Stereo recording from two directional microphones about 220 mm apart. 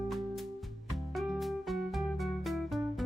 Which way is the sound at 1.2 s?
Centre (ahead or behind).